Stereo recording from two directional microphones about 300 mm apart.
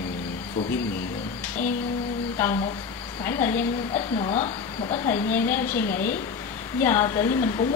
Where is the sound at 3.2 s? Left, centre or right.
Centre.